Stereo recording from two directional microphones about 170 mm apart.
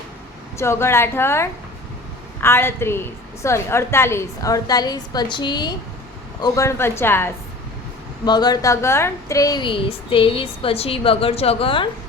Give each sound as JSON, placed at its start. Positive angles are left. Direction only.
{"t": 0.5, "sound": "a woman's voice", "side_deg": 15}
{"t": 8.2, "sound": "a woman's voice", "side_deg": 25}